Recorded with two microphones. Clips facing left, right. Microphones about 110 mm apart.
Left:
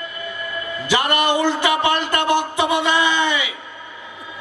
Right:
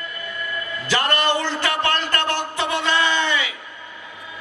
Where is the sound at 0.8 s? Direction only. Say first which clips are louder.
Left 2 dB; 15° left (ahead or behind).